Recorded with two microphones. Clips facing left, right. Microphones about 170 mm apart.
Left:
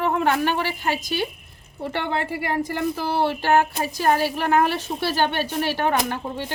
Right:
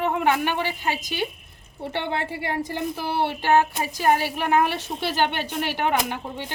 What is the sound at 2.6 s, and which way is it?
Speech, 20° right (ahead or behind).